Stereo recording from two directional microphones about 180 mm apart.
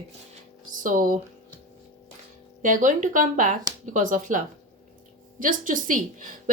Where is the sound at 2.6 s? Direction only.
45° right (ahead or behind).